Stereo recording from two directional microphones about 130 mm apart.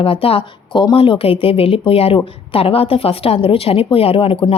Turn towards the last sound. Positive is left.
turn(degrees=45)  # may be behind; listen again after turning